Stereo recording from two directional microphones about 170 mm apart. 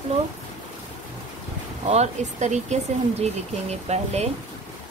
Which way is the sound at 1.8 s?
40° right (ahead or behind).